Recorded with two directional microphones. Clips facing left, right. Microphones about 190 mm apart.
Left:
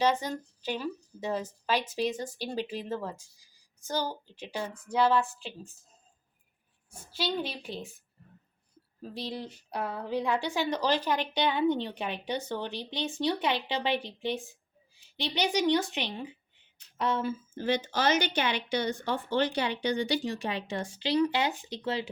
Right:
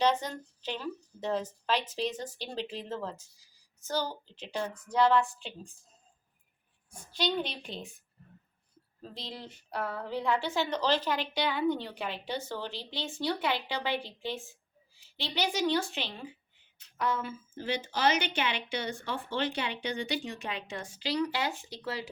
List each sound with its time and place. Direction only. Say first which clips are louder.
0.0 s a woman's voice: left 1 dB; 10° left (ahead or behind)
6.9 s a woman's voice: right 1 dB; 5° left (ahead or behind)
9.0 s a woman's voice: left 6 dB; 10° left (ahead or behind); by 17.3 s 25° left (ahead or behind)
17.6 s speech: left 1 dB; 45° left (ahead or behind); by 22.1 s 25° left (ahead or behind)